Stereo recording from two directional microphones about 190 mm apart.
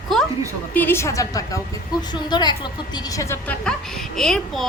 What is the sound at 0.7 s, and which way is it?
A woman's voice, 10° left (ahead or behind).